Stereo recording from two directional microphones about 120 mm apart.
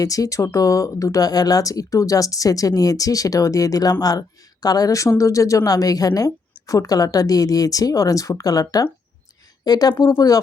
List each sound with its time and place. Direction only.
0.0 s a woman's voice: 30° left (ahead or behind)